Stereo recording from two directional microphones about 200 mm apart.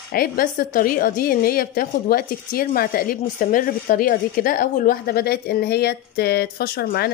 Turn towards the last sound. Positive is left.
turn(degrees=50)  # may be behind; listen again after turning